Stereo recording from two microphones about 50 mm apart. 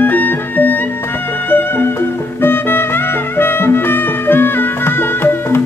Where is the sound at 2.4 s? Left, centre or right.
Left.